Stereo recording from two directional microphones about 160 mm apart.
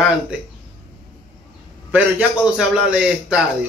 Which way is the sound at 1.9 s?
10° right (ahead or behind).